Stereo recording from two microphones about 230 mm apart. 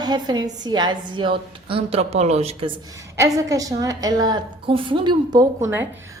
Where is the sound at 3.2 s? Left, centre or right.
Centre.